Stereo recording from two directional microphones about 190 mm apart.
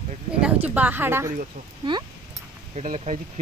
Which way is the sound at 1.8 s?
25° right (ahead or behind).